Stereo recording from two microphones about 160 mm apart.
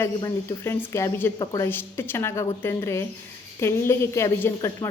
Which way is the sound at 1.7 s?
15° left (ahead or behind).